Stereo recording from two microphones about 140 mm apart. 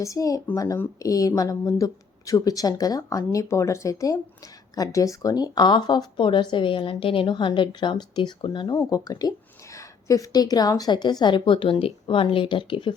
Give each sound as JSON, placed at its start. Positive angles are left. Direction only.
{"t": 0.0, "sound": "speech", "side_deg": 25}